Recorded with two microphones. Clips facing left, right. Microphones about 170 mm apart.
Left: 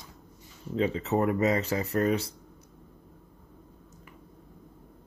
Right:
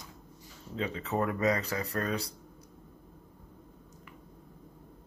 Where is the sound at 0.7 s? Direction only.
25° left (ahead or behind).